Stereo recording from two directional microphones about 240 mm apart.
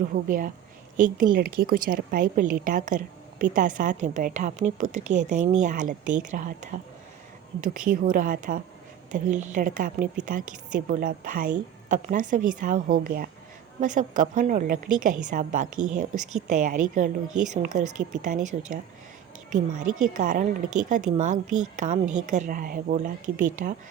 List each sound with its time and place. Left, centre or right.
0.1 s a woman's voice: right